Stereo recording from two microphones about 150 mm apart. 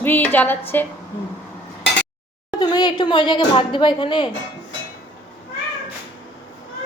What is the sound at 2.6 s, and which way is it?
Speech, 30° left (ahead or behind).